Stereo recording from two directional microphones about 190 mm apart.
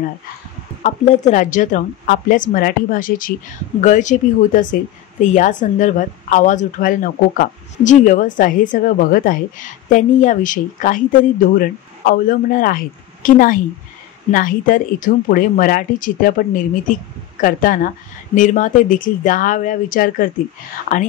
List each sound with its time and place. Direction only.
0.8 s a woman's voice: 40° left (ahead or behind)
17.4 s a woman's voice: 45° left (ahead or behind)